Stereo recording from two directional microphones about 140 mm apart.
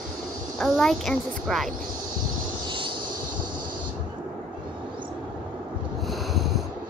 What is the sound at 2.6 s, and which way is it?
Vehicle, 35° right (ahead or behind).